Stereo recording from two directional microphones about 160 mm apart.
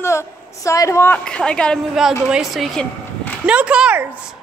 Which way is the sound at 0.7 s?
20° left (ahead or behind).